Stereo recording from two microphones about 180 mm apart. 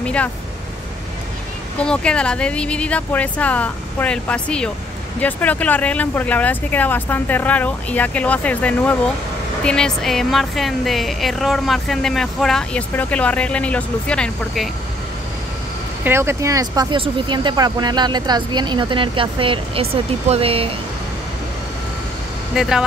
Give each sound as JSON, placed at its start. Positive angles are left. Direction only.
{"t": 0.0, "sound": "vehicle", "side_deg": 5}
{"t": 1.8, "sound": "speech", "side_deg": 5}
{"t": 16.0, "sound": "speech", "side_deg": -15}
{"t": 22.6, "sound": "speech", "side_deg": -5}